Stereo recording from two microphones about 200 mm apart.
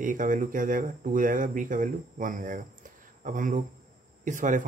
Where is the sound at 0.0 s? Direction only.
40° right (ahead or behind).